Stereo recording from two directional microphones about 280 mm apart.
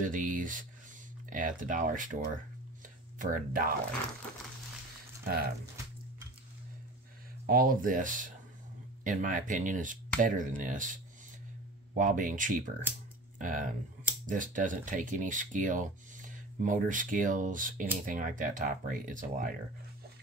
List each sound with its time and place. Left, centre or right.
0.0 s speech: right
5.2 s speech: right
7.4 s speech: right